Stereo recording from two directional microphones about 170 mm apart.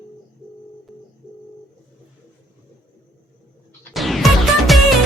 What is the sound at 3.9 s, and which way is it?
Music, centre (ahead or behind).